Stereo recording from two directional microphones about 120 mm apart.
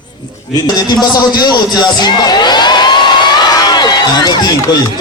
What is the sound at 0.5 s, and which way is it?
A man's voice, 35° left (ahead or behind).